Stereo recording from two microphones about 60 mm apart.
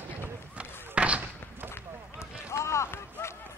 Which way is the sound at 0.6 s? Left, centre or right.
Centre.